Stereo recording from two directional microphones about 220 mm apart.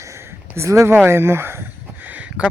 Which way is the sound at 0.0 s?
15° right (ahead or behind).